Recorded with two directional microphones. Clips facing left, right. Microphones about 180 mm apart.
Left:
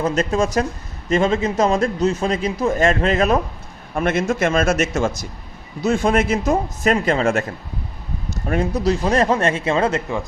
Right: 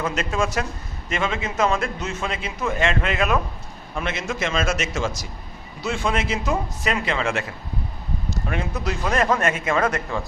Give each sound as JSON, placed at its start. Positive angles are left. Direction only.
{"t": 0.0, "sound": "a man's voice", "side_deg": 35}
{"t": 3.9, "sound": "a man's voice", "side_deg": 50}
{"t": 8.4, "sound": "a man's voice", "side_deg": 40}